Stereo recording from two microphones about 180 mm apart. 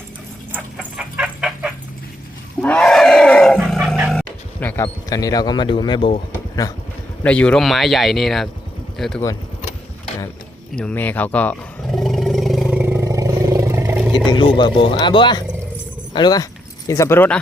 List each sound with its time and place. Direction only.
0.5 s chicken: 10° right (ahead or behind)
2.6 s wild animals: 5° left (ahead or behind)
3.8 s a sound: centre (ahead or behind); by 6.1 s 25° left (ahead or behind)
7.2 s speech: 5° left (ahead or behind)
10.8 s speech: 5° left (ahead or behind)
11.9 s vehicle: centre (ahead or behind)
14.3 s speech: 25° left (ahead or behind); by 17.4 s 10° left (ahead or behind)